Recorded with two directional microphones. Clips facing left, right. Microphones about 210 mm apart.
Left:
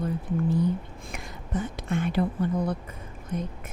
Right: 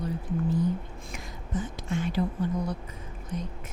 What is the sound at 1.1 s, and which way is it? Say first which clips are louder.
Speech: left 2 dB; 65° left (ahead or behind).